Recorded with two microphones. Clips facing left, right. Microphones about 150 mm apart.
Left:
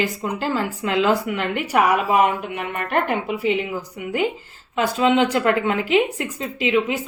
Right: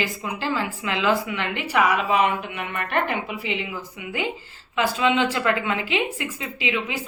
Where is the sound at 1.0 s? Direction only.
45° left (ahead or behind).